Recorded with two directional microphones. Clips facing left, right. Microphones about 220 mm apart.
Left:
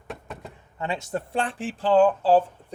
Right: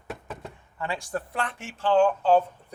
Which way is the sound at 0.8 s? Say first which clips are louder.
Left 2 dB; 20° left (ahead or behind).